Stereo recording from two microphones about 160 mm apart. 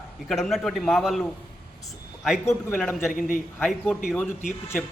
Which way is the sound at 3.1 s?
60° left (ahead or behind).